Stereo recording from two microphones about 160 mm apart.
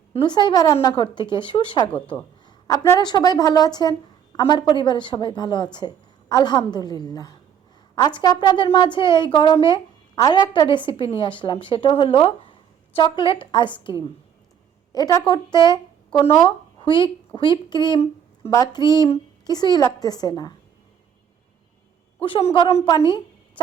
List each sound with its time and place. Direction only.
0.1 s a woman's voice: 30° left (ahead or behind)
1.9 s speech: 10° left (ahead or behind)
2.6 s a woman's voice: 20° left (ahead or behind)
14.9 s a woman's voice: 25° left (ahead or behind)
22.2 s a woman's voice: 35° left (ahead or behind)